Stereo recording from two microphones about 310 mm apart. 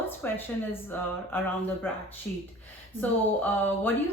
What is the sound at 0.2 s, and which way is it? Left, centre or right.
A woman's voice, centre.